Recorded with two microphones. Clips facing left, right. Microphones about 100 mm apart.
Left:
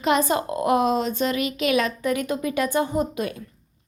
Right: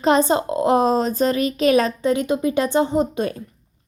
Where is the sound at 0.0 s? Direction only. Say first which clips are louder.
Right 4 dB; 30° right (ahead or behind).